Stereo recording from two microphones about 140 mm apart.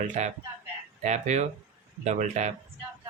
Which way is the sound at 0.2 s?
55° right (ahead or behind).